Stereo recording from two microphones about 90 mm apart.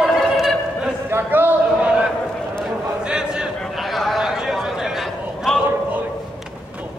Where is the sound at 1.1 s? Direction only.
25° right (ahead or behind).